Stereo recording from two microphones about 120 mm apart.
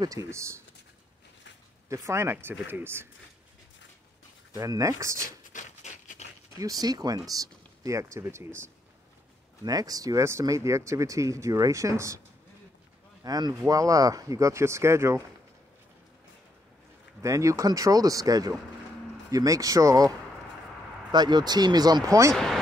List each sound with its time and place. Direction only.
0.0 s speech: 25° right (ahead or behind)
1.9 s speech: 25° right (ahead or behind)
4.6 s speech: 30° right (ahead or behind)
5.5 s a sound: 80° left
6.6 s speech: 30° right (ahead or behind)
13.2 s speech: 30° right (ahead or behind)
17.2 s speech: 25° right (ahead or behind)
22.3 s speech: 5° left (ahead or behind)